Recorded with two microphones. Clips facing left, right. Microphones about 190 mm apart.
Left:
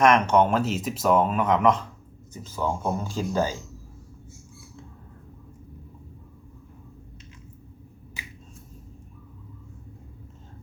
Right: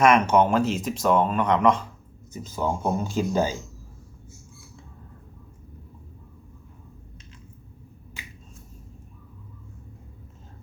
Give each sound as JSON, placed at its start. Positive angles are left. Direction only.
{"t": 0.0, "sound": "speech", "side_deg": -5}
{"t": 2.3, "sound": "speech", "side_deg": -15}